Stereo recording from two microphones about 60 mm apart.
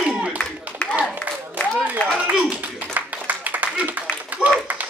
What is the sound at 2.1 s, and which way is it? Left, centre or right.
Speech, right.